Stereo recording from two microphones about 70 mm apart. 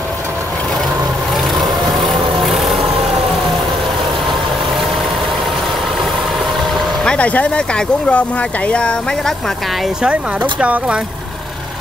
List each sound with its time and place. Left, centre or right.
2.0 s vehicle: centre
7.1 s speech: centre
10.6 s speech: centre